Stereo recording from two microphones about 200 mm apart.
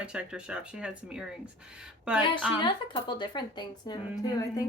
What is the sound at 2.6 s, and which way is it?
A woman's voice, 25° left (ahead or behind).